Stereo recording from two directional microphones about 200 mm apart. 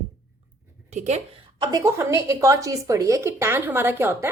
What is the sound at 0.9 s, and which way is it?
Speech, 35° right (ahead or behind).